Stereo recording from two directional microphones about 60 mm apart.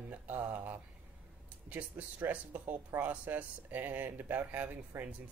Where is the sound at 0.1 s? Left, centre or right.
Right.